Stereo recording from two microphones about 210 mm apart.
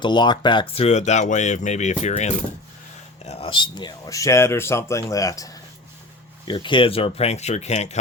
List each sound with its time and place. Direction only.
0.0 s speech: 20° left (ahead or behind)